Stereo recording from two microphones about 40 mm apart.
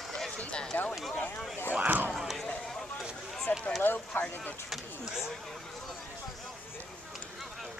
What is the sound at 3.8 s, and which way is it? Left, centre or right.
Speech, left.